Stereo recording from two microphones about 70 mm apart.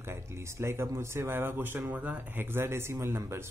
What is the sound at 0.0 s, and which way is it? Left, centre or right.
Speech, right.